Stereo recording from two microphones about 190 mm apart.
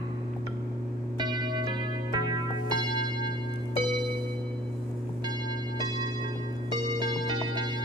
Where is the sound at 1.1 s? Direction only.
25° right (ahead or behind).